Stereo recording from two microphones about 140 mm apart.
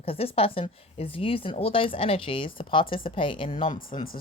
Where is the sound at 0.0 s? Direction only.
40° left (ahead or behind).